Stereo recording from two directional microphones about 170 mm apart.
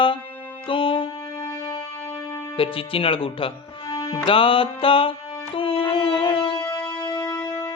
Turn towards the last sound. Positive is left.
turn(degrees=15)  # may be behind; listen again after turning